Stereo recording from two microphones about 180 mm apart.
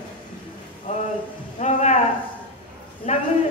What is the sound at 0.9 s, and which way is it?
A woman's voice, 35° left (ahead or behind).